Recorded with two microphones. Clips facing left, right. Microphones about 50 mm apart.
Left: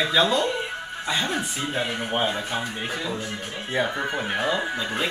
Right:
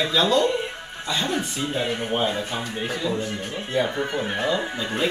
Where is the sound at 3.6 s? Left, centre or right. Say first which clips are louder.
Right 1 dB; centre.